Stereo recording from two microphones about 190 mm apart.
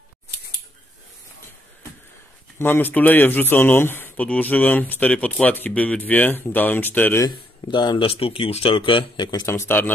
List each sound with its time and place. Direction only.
2.6 s speech: 10° left (ahead or behind)
7.2 s speech: 25° left (ahead or behind)